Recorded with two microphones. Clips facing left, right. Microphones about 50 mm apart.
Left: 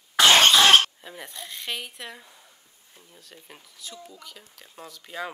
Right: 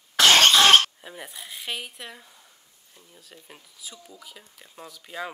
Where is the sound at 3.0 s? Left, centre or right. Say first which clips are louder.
Even; centre.